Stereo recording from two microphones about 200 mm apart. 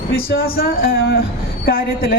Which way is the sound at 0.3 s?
50° left (ahead or behind).